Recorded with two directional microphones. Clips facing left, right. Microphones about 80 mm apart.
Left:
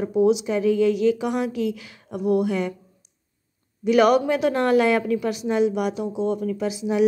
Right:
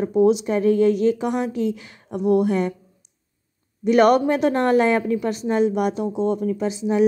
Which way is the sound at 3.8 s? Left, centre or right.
Right.